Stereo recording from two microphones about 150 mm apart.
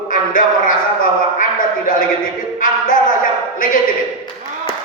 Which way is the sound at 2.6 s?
65° left (ahead or behind).